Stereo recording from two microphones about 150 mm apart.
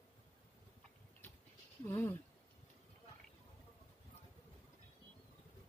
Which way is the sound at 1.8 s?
20° left (ahead or behind).